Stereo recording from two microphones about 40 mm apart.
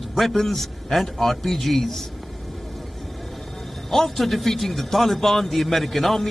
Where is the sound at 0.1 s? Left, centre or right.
Centre.